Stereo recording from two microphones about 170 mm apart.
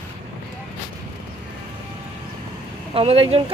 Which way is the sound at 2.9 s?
35° right (ahead or behind).